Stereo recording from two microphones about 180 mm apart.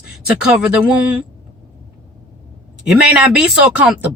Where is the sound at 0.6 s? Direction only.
5° right (ahead or behind).